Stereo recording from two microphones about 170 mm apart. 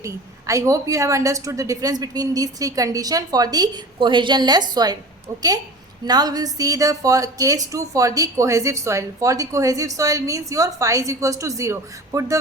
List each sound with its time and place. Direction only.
0.0 s a woman's voice: 20° right (ahead or behind)